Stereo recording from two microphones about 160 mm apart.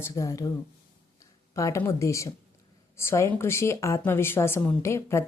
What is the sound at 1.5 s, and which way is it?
A woman's voice, 20° left (ahead or behind).